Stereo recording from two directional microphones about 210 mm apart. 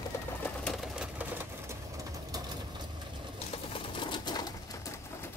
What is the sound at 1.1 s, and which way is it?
Sewing machine, 10° right (ahead or behind).